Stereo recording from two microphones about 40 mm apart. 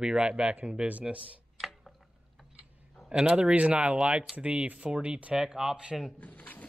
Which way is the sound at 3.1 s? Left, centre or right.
Right.